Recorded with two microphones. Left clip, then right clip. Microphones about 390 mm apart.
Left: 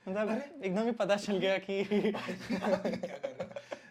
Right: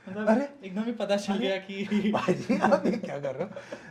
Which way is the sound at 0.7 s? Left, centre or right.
Left.